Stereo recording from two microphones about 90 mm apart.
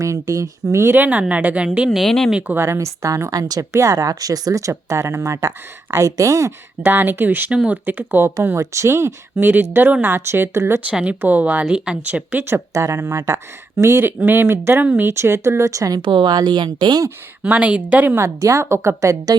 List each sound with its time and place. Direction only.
0.0 s speech: 35° right (ahead or behind)
0.9 s speech: 20° right (ahead or behind)
2.0 s speech: 5° left (ahead or behind)
2.5 s speech: 30° right (ahead or behind)
8.5 s speech: 35° right (ahead or behind)
10.8 s speech: 15° right (ahead or behind)
12.5 s speech: 35° right (ahead or behind)
16.0 s speech: 60° right (ahead or behind)
17.4 s speech: 15° right (ahead or behind)
18.2 s speech: 35° right (ahead or behind)